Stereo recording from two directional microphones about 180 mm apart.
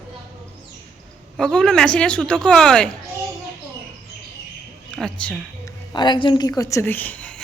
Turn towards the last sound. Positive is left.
turn(degrees=5)  # may be behind; listen again after turning